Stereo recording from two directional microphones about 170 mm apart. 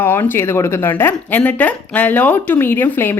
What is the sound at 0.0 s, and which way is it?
A woman's voice, 10° left (ahead or behind).